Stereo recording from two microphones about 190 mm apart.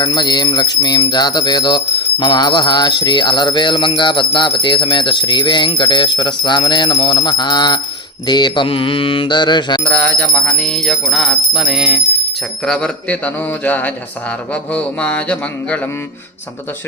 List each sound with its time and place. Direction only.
0.0 s bell: 25° left (ahead or behind)
9.9 s jingle bell: 10° left (ahead or behind)
12.6 s speech: 5° left (ahead or behind)
14.5 s jingle bell: 5° left (ahead or behind)